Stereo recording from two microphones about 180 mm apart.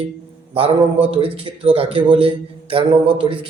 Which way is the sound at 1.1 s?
30° right (ahead or behind).